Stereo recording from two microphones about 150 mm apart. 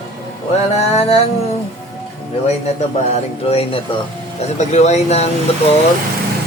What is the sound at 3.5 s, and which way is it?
Speech, 40° left (ahead or behind).